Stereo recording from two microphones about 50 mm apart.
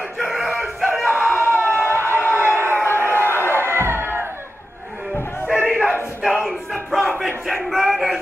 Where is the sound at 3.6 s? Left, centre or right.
Right.